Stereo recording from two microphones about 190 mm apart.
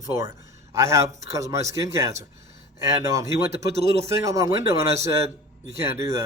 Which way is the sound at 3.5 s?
35° right (ahead or behind).